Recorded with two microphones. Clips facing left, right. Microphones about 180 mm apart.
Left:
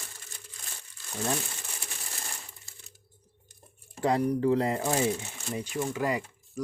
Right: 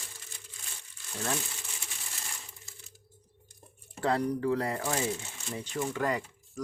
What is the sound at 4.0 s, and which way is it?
Speech, 15° left (ahead or behind).